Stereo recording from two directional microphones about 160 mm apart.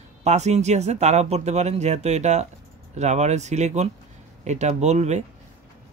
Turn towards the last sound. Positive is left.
turn(degrees=-45)  # may be behind; listen again after turning